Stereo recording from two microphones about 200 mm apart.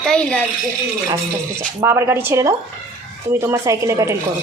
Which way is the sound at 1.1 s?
10° right (ahead or behind).